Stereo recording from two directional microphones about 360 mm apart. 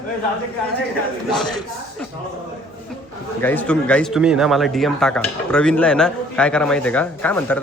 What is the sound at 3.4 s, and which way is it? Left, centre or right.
Speech, centre.